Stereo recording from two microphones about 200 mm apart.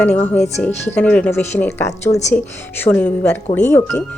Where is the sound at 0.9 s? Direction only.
10° left (ahead or behind).